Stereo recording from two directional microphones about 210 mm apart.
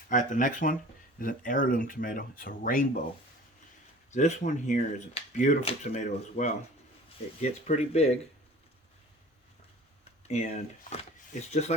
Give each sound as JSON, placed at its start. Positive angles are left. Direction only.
{"t": 0.1, "sound": "speech", "side_deg": 35}
{"t": 4.1, "sound": "speech", "side_deg": 35}
{"t": 10.2, "sound": "speech", "side_deg": 30}